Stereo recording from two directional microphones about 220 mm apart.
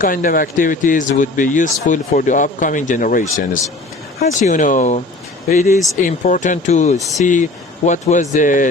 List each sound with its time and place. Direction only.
0.0 s speech: 40° left (ahead or behind)